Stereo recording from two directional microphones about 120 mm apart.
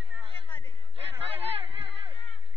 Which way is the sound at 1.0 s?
50° right (ahead or behind).